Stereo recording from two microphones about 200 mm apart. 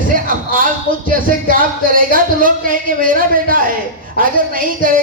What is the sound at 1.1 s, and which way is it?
A man's voice, 45° right (ahead or behind).